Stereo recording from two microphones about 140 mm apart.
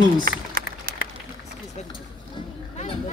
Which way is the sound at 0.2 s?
90° right.